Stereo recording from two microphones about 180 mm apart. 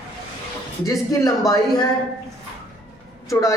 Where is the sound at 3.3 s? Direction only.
20° left (ahead or behind).